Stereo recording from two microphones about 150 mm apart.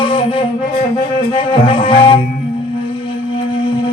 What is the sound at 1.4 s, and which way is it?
Music, 35° left (ahead or behind).